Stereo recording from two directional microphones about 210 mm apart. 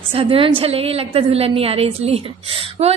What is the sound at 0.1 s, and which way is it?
A woman's voice, 25° right (ahead or behind).